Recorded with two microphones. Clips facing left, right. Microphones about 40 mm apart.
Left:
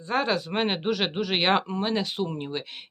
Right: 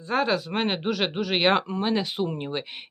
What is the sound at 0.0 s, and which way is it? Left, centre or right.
Speech, centre.